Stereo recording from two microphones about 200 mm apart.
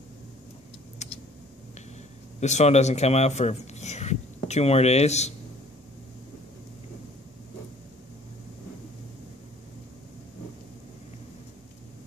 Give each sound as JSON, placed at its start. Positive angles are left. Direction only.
{"t": 1.0, "sound": "computer keyboard", "side_deg": 35}
{"t": 2.4, "sound": "a man's voice", "side_deg": 35}